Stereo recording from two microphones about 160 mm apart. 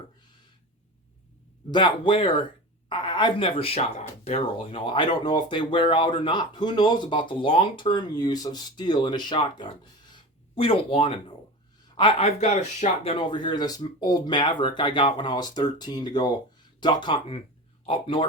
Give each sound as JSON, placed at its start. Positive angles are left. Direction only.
{"t": 1.7, "sound": "speech", "side_deg": 30}
{"t": 10.1, "sound": "a sound", "side_deg": 35}
{"t": 11.9, "sound": "speech", "side_deg": 30}
{"t": 13.1, "sound": "speech", "side_deg": 30}